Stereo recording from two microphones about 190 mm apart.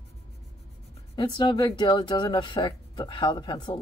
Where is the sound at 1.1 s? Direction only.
25° left (ahead or behind).